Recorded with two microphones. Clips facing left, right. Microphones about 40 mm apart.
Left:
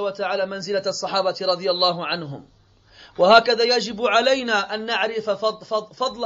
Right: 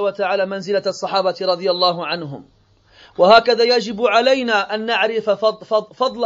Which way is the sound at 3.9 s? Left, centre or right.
Right.